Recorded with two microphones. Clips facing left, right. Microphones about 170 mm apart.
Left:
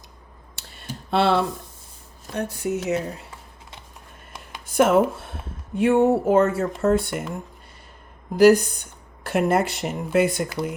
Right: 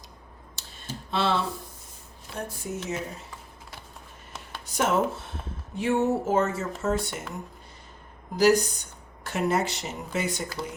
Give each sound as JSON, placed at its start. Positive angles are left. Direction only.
{"t": 1.1, "sound": "speech", "side_deg": 60}
{"t": 2.3, "sound": "speech", "side_deg": 70}
{"t": 4.6, "sound": "speech", "side_deg": 55}
{"t": 8.4, "sound": "speech", "side_deg": 55}